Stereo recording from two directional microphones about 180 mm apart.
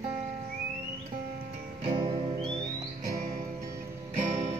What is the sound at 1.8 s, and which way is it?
Music, 30° right (ahead or behind).